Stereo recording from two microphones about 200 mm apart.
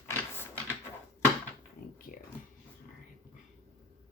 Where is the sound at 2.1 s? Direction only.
45° left (ahead or behind).